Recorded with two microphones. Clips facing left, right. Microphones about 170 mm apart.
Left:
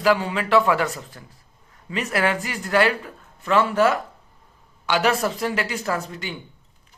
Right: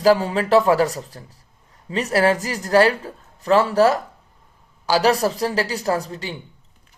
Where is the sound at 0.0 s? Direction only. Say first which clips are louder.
Right 4 dB; 35° right (ahead or behind).